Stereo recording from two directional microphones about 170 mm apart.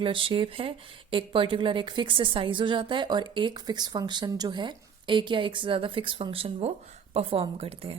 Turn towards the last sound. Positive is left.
turn(degrees=-35)  # may be behind; listen again after turning